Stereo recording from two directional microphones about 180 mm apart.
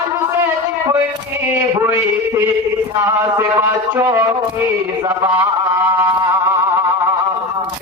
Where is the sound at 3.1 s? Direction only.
15° right (ahead or behind).